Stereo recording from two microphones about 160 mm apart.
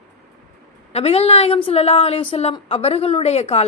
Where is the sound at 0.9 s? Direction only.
40° left (ahead or behind).